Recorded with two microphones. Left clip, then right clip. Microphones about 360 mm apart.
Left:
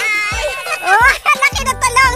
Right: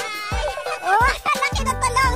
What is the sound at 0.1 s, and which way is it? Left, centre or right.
Music, right.